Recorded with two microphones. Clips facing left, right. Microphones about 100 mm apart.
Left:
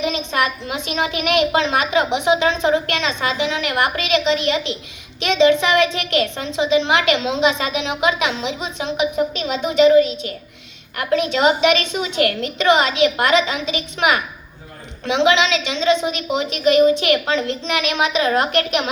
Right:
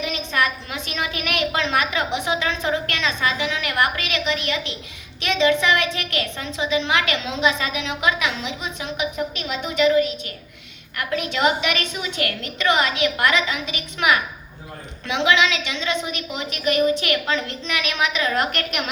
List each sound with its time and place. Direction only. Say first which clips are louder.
0.0 s a woman's voice: left 3 dB; 25° left (ahead or behind)